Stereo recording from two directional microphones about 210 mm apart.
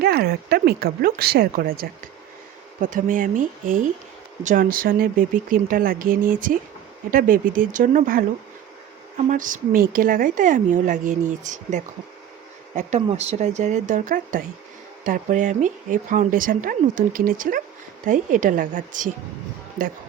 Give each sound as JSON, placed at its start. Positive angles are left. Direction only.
{"t": 0.0, "sound": "speech", "side_deg": -50}